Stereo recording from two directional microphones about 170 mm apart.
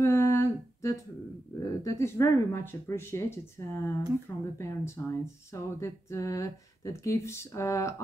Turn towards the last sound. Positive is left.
turn(degrees=20)  # may be behind; listen again after turning